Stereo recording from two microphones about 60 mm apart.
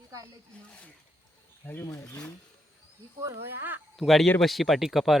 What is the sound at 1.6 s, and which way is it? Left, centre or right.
Speech, left.